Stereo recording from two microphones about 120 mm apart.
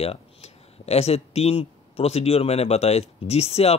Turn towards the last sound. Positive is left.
turn(degrees=60)  # may be behind; listen again after turning